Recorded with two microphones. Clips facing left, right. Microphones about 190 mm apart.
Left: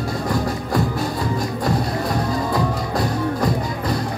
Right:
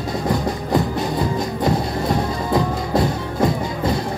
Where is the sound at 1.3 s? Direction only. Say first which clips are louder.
Right 2 dB; 25° right (ahead or behind).